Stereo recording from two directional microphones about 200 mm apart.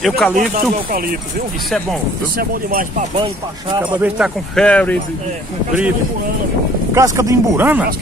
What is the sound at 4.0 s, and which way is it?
Speech, 5° right (ahead or behind).